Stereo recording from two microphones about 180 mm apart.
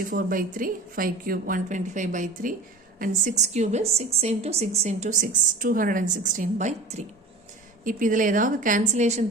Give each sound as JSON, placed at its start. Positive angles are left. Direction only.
{"t": 0.0, "sound": "a woman's voice", "side_deg": -50}